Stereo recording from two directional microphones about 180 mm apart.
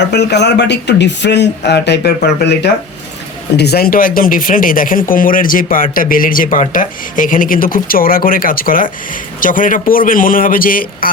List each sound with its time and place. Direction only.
0.0 s speech: 70° left (ahead or behind); by 11.1 s 50° left (ahead or behind)